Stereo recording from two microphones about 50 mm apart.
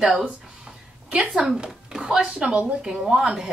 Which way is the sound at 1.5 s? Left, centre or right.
Centre.